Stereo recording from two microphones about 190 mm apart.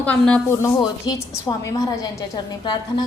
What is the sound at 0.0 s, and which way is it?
Speech, 5° left (ahead or behind).